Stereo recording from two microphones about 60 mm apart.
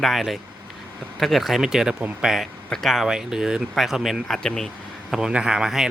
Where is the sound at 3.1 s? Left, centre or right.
Centre.